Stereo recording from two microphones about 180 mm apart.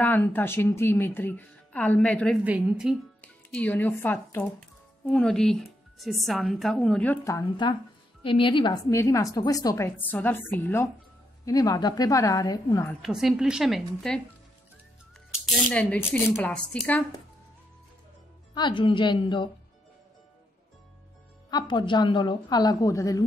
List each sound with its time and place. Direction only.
0.0 s speech: 10° left (ahead or behind)
2.4 s speech: 5° right (ahead or behind)
3.2 s a woman's voice: 10° left (ahead or behind); by 8.7 s 25° left (ahead or behind)
8.9 s a woman's voice: 15° left (ahead or behind)
13.0 s speech: centre (ahead or behind)
15.3 s speech: centre (ahead or behind)
18.5 s a woman's voice: 25° left (ahead or behind)
21.5 s a woman's voice: 25° left (ahead or behind)